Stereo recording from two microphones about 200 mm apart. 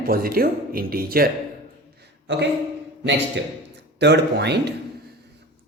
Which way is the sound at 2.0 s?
60° right (ahead or behind).